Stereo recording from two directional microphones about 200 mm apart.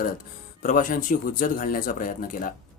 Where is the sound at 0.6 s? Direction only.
40° left (ahead or behind).